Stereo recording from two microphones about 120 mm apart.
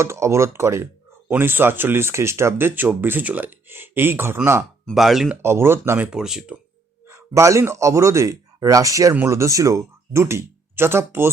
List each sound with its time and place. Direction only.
0.0 s speech: 25° right (ahead or behind)
4.9 s speech: centre (ahead or behind)
5.3 s speech: 20° right (ahead or behind)
6.1 s speech: 5° right (ahead or behind)
7.1 s speech: 25° right (ahead or behind)